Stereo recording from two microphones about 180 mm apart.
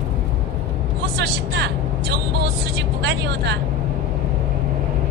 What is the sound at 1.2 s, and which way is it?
Vehicle, 70° right (ahead or behind).